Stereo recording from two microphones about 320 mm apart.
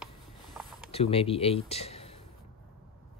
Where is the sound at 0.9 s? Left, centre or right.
Centre.